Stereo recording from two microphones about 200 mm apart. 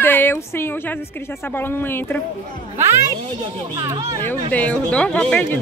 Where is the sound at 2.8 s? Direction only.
15° right (ahead or behind).